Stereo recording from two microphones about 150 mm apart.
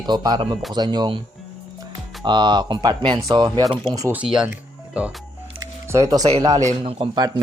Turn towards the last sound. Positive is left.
turn(degrees=-25)  # may be behind; listen again after turning